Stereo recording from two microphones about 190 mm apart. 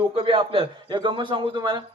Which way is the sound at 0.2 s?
25° right (ahead or behind).